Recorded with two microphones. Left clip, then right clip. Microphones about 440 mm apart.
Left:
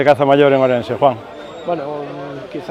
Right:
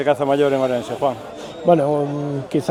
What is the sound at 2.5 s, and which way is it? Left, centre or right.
Speech, right.